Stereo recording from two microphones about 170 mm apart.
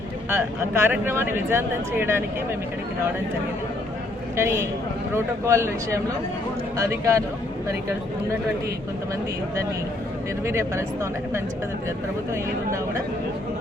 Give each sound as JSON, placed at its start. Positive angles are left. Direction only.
{"t": 0.3, "sound": "speech", "side_deg": -15}
{"t": 4.4, "sound": "speech", "side_deg": -15}
{"t": 10.4, "sound": "speech", "side_deg": -15}